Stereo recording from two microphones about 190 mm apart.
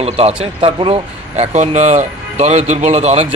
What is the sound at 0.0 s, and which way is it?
Speech, 30° right (ahead or behind).